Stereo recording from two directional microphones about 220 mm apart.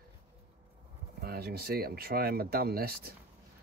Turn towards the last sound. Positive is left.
turn(degrees=-45)  # may be behind; listen again after turning